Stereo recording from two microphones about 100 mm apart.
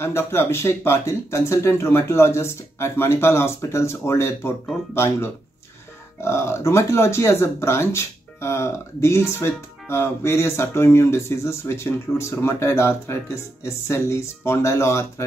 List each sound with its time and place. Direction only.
0.0 s speech: 25° left (ahead or behind)